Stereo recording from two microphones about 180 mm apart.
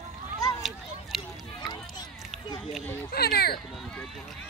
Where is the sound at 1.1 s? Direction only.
Centre (ahead or behind).